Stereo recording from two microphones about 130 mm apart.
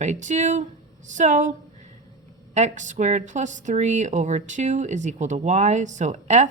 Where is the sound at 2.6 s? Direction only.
65° right (ahead or behind).